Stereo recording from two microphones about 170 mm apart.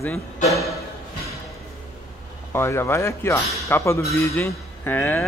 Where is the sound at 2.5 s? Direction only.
15° left (ahead or behind).